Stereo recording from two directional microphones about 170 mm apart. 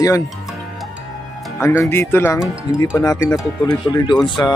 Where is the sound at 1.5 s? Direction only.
15° left (ahead or behind).